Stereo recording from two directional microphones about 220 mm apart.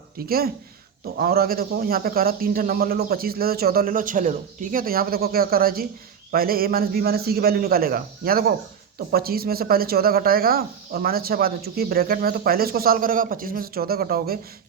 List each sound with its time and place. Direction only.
0.2 s speech: 45° right (ahead or behind)